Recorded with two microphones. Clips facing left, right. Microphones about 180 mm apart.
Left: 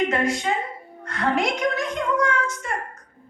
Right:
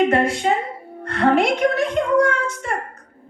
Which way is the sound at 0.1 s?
60° right (ahead or behind).